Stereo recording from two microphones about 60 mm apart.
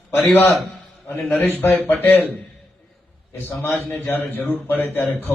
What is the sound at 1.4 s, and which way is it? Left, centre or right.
Speech, left.